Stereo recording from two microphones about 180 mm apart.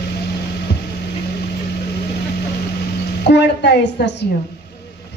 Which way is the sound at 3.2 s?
70° left (ahead or behind).